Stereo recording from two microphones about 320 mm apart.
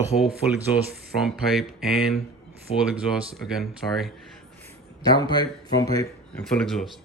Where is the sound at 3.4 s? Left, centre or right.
Centre.